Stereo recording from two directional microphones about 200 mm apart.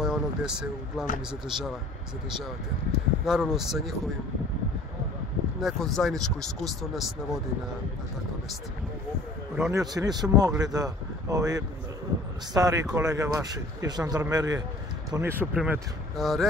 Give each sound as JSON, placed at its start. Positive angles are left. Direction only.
{"t": 0.0, "sound": "speech", "side_deg": -5}
{"t": 3.3, "sound": "speech", "side_deg": 0}
{"t": 5.6, "sound": "speech", "side_deg": 0}
{"t": 9.6, "sound": "speech", "side_deg": -15}